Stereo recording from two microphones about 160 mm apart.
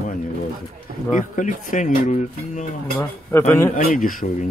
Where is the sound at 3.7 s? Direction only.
55° left (ahead or behind).